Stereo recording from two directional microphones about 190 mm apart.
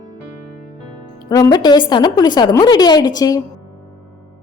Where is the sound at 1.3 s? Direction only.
20° left (ahead or behind).